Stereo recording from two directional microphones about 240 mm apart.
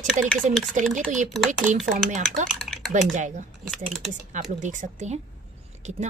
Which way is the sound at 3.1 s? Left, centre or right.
Right.